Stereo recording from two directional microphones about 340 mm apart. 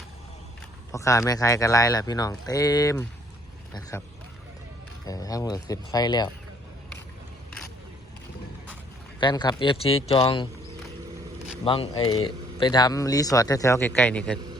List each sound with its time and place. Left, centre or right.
0.9 s speech: centre
5.0 s speech: centre
9.2 s speech: centre
11.6 s speech: centre